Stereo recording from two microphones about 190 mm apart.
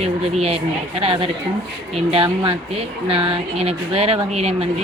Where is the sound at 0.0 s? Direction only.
30° right (ahead or behind).